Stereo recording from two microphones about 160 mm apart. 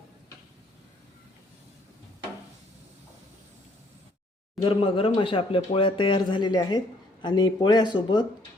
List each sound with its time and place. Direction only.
4.6 s speech: 35° left (ahead or behind)